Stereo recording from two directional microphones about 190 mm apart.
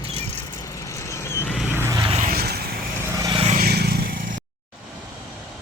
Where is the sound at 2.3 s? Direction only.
55° right (ahead or behind).